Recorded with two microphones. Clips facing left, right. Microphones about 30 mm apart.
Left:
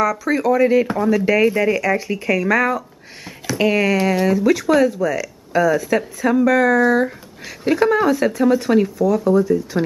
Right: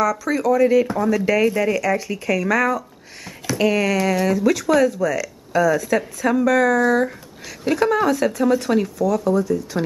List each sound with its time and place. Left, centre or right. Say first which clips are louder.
0.0 s speech: left 2 dB; centre